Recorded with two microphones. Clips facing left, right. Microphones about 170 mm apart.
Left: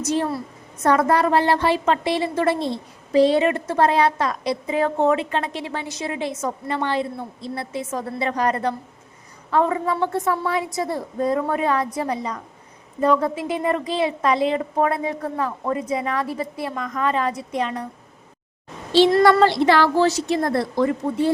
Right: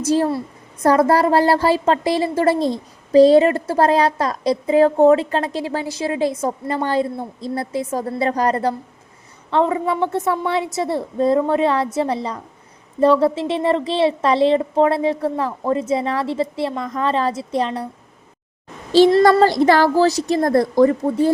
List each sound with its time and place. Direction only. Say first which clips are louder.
0.0 s a woman's voice: right 5 dB; 30° right (ahead or behind)
9.5 s a woman's voice: right 2 dB; 25° right (ahead or behind)
19.2 s a woman's voice: right 2 dB; 40° right (ahead or behind)